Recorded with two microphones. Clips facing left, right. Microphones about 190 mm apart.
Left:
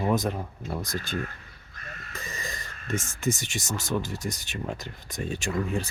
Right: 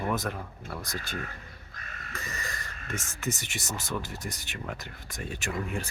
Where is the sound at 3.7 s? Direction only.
90° left.